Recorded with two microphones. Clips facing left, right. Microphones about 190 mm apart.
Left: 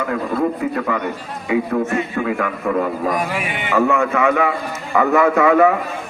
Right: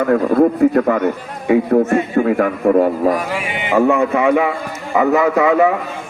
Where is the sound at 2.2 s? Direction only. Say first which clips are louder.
Right 6 dB; 35° right (ahead or behind).